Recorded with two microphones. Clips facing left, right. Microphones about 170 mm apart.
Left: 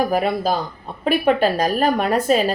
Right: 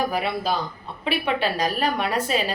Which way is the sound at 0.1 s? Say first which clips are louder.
Left 5 dB; 45° left (ahead or behind).